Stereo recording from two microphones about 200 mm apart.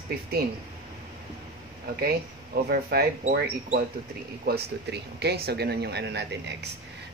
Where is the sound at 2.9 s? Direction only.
50° right (ahead or behind).